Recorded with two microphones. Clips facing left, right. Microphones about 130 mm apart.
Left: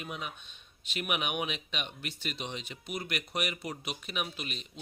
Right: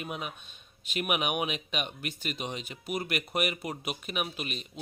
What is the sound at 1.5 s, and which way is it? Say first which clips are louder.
Speech: right 4 dB; 50° right (ahead or behind).